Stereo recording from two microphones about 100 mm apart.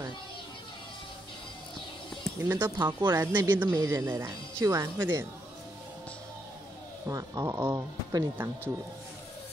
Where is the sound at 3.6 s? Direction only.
30° right (ahead or behind).